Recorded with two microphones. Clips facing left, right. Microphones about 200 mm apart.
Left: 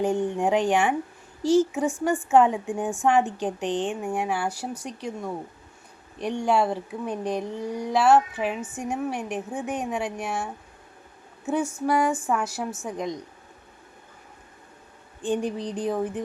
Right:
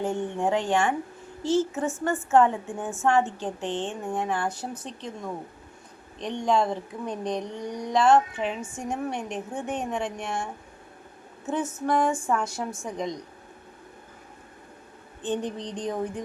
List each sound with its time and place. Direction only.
0.0 s a woman's voice: 15° left (ahead or behind)
15.2 s a woman's voice: 10° left (ahead or behind)